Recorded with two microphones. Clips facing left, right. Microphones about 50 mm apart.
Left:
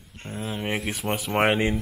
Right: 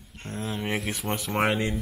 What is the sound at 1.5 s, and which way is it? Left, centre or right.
Speech, left.